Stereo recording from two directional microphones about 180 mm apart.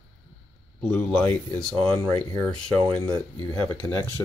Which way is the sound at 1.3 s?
5° left (ahead or behind).